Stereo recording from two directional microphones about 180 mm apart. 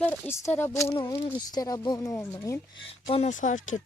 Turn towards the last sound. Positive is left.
turn(degrees=45)  # may be behind; listen again after turning